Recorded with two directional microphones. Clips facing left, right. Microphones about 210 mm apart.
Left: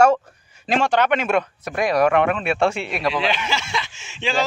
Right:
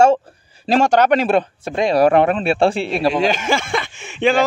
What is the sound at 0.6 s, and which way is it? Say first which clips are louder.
Speech: right 5 dB; 40° right (ahead or behind).